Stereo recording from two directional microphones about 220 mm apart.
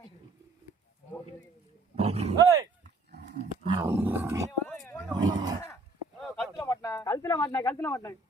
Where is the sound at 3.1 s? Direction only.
50° right (ahead or behind).